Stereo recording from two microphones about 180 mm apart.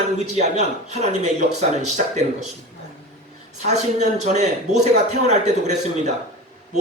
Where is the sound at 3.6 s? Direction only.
40° right (ahead or behind).